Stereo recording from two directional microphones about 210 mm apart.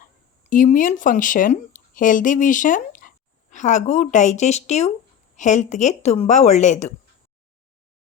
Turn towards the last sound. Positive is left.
turn(degrees=35)  # may be behind; listen again after turning